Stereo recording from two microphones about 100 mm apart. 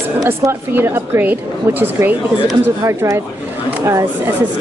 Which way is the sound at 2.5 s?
30° right (ahead or behind).